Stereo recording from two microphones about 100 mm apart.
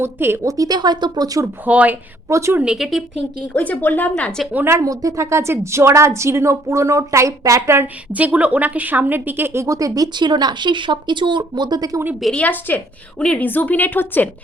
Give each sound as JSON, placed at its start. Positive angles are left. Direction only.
{"t": 0.0, "sound": "a woman's voice", "side_deg": -25}
{"t": 0.5, "sound": "speech", "side_deg": -40}
{"t": 1.6, "sound": "speech", "side_deg": -15}
{"t": 2.3, "sound": "a woman's voice", "side_deg": -30}
{"t": 2.6, "sound": "speech", "side_deg": -5}
{"t": 3.5, "sound": "a woman's voice", "side_deg": 15}
{"t": 4.1, "sound": "a woman's voice", "side_deg": 10}
{"t": 4.5, "sound": "a woman's voice", "side_deg": -25}
{"t": 12.2, "sound": "a woman's voice", "side_deg": 10}